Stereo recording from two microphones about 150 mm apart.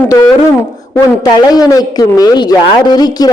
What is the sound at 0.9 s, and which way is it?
Speech, 25° left (ahead or behind).